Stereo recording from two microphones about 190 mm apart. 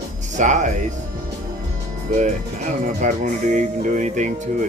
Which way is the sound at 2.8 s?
40° right (ahead or behind).